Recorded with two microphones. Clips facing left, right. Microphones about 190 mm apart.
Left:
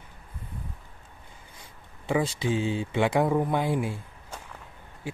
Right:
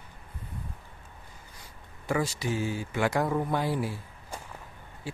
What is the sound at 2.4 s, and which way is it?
Speech, 25° left (ahead or behind).